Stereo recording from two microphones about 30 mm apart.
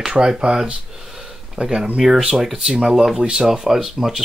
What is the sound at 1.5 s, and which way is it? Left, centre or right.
Speech, right.